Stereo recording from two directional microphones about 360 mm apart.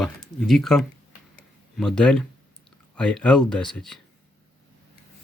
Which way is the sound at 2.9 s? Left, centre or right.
Centre.